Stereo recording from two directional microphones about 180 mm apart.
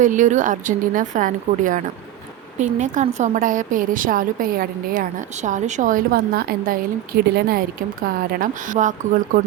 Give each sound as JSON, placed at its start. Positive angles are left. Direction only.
{"t": 0.0, "sound": "speech", "side_deg": -45}